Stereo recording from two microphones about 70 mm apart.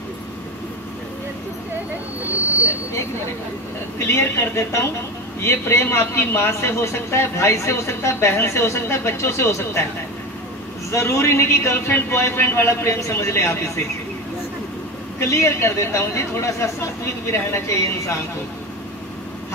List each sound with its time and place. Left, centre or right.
4.0 s a man's voice: left
10.9 s a man's voice: left
15.1 s a man's voice: left